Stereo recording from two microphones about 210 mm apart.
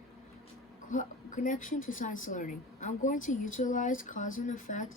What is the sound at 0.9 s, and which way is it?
A woman's voice, 35° left (ahead or behind).